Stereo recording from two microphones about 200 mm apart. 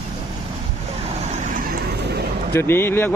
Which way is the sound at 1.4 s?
45° right (ahead or behind).